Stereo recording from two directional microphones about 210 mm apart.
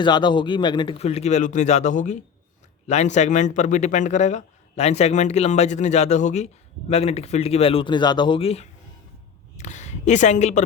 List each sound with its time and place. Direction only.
0.0 s a man's voice: 20° left (ahead or behind)